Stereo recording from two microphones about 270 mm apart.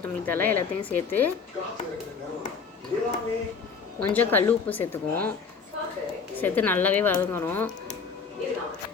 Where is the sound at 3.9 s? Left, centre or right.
Centre.